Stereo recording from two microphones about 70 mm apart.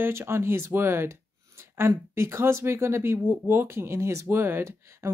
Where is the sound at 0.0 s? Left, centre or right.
Right.